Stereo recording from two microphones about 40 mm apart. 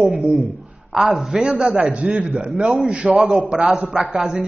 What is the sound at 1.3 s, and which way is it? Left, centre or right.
A man's voice, right.